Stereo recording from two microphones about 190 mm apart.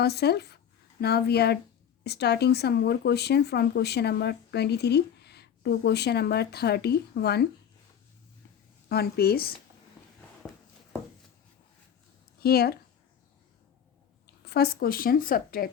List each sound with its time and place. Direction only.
0.0 s speech: 60° left (ahead or behind)
8.9 s speech: 55° left (ahead or behind)
10.4 s a sound: 5° left (ahead or behind)
12.4 s speech: 55° left (ahead or behind)
14.4 s a woman's voice: 55° left (ahead or behind)